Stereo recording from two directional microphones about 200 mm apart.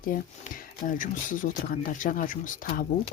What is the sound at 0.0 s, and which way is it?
Speech, 45° left (ahead or behind).